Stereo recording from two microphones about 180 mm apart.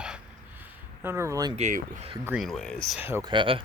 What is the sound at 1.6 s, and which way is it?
Speech, 40° right (ahead or behind).